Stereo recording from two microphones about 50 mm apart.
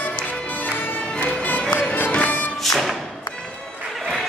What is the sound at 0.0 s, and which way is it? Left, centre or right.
Music, left.